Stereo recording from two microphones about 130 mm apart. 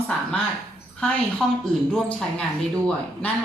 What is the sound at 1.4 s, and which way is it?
Speech, 5° left (ahead or behind).